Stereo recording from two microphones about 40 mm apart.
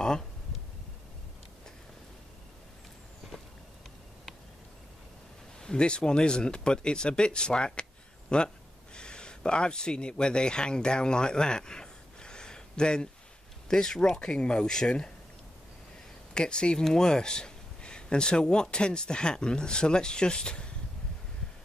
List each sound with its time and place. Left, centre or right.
5.6 s a man's voice: left
16.3 s speech: left